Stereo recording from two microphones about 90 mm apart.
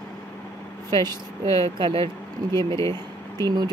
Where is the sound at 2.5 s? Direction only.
35° left (ahead or behind).